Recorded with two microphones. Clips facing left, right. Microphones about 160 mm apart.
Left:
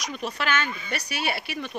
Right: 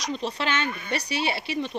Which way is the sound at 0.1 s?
25° right (ahead or behind).